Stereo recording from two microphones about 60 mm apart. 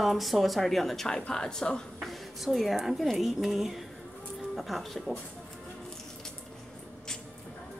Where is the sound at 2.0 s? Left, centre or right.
Centre.